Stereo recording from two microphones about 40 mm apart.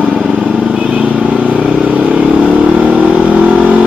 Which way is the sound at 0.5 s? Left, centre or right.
Right.